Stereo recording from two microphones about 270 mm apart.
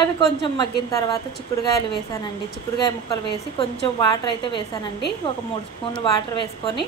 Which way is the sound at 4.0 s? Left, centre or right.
Centre.